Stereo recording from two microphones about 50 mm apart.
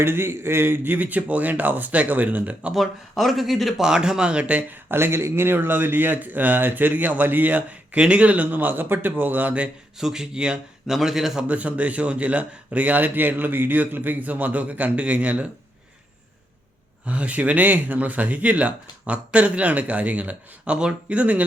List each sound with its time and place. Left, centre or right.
0.0 s speech: right
2.7 s speech: centre
3.8 s speech: centre
4.7 s speech: right
10.0 s speech: centre
10.9 s speech: centre
11.4 s speech: right
17.1 s speech: right